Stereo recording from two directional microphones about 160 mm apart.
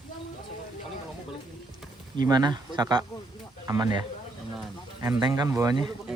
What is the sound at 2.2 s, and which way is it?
Speech, 25° right (ahead or behind).